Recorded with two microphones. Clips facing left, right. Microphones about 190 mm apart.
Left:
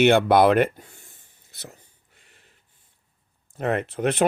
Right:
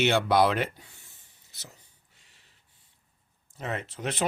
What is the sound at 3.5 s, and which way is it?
Speech, 60° left (ahead or behind).